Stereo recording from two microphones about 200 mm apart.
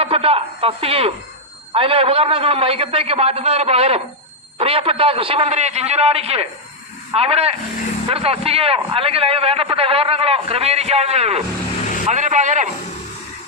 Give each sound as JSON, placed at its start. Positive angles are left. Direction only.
{"t": 0.0, "sound": "a man's voice", "side_deg": -30}